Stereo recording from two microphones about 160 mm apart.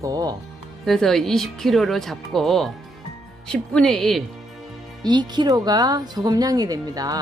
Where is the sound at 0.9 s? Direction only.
Centre (ahead or behind).